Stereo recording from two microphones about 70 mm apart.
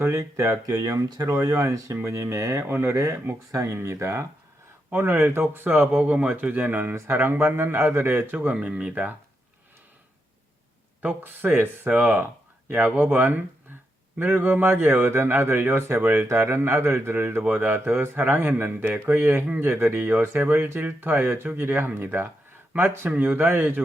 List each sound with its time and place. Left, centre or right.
0.0 s speech: right
1.0 s speech: right
1.3 s a man's voice: right
8.4 s speech: centre
11.0 s a man's voice: right